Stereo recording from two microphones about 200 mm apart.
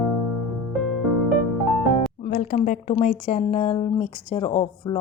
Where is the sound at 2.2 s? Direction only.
40° left (ahead or behind).